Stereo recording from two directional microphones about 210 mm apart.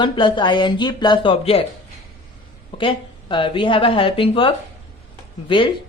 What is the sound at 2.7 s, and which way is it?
Speech, 25° left (ahead or behind).